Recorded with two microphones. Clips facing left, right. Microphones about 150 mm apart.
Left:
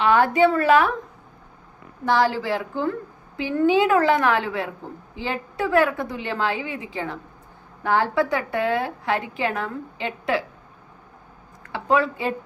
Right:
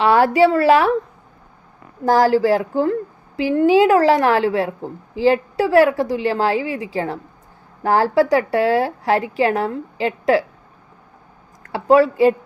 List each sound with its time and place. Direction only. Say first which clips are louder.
0.0 s a woman's voice: right 4 dB; 35° right (ahead or behind)
2.0 s a woman's voice: right 7 dB; 40° right (ahead or behind)
11.6 s speech: right 8 dB; 35° right (ahead or behind)